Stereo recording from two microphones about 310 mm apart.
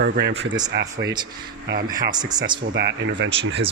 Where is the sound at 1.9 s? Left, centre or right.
Centre.